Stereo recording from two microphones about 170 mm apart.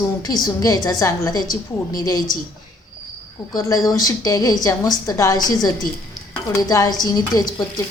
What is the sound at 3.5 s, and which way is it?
Speech, 20° left (ahead or behind).